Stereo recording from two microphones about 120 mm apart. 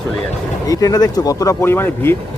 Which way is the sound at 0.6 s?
30° left (ahead or behind).